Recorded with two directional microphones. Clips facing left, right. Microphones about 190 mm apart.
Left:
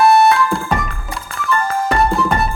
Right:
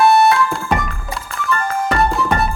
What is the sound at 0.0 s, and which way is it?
Music, centre (ahead or behind).